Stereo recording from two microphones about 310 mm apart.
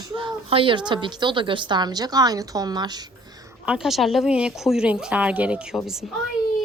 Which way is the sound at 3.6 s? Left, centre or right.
Centre.